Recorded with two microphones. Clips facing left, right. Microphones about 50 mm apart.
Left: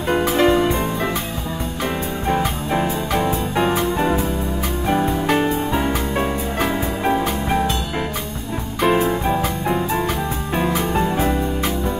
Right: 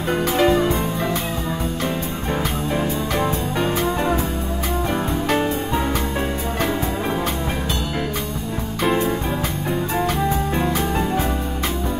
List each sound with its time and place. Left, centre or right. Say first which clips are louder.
0.4 s music: left 1 dB; left
2.3 s music: left 1 dB; left